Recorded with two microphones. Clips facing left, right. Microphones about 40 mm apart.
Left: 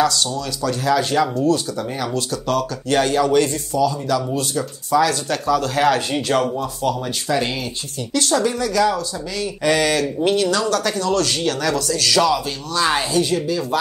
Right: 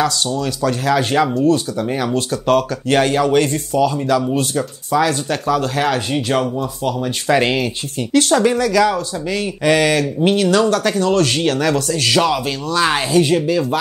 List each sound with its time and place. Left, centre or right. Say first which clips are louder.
0.0 s speech: right 1 dB; right
6.1 s speech: right 1 dB; centre
7.2 s speech: right 7 dB; right
8.9 s speech: right 4 dB; right
12.8 s speech: right 3 dB; right